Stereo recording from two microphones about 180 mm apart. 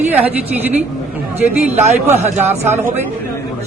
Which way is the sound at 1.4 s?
40° right (ahead or behind).